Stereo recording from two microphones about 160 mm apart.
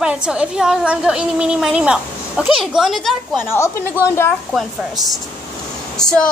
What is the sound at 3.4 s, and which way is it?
Speech, 15° left (ahead or behind).